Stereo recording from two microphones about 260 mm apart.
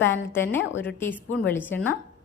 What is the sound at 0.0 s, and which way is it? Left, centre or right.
A woman's voice, centre.